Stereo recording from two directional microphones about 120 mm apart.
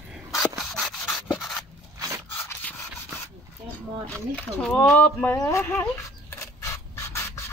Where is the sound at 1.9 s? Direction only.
25° right (ahead or behind).